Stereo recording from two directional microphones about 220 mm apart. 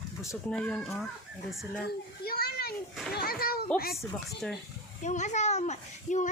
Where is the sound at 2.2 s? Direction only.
45° left (ahead or behind).